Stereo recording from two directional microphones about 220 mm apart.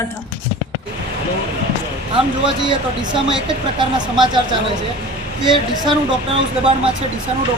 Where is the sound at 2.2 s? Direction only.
20° right (ahead or behind).